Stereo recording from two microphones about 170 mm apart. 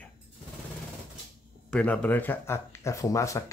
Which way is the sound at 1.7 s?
10° left (ahead or behind).